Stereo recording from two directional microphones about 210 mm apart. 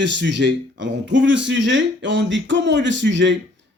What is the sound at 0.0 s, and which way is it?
Speech, 55° right (ahead or behind).